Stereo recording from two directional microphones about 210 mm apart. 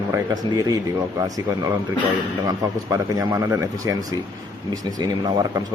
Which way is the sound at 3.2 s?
15° right (ahead or behind).